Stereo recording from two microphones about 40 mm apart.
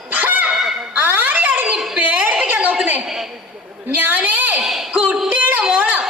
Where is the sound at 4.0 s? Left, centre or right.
Right.